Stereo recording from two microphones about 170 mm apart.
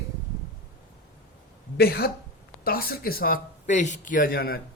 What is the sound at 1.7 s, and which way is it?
A man's voice, 65° left (ahead or behind).